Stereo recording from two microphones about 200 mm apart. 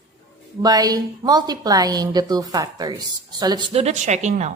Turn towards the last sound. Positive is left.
turn(degrees=-35)  # may be behind; listen again after turning